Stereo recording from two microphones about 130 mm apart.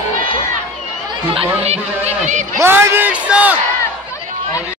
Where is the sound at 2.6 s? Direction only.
15° right (ahead or behind).